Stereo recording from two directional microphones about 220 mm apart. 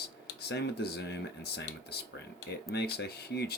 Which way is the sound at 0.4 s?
50° left (ahead or behind).